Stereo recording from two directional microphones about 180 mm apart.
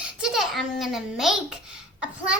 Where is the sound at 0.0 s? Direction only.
Centre (ahead or behind).